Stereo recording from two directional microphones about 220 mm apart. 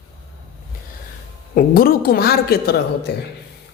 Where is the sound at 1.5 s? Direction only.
40° left (ahead or behind).